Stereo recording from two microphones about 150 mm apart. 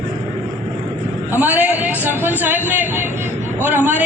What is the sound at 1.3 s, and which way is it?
A man's voice, 10° right (ahead or behind).